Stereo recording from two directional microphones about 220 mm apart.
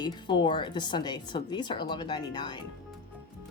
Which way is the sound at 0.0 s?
20° left (ahead or behind).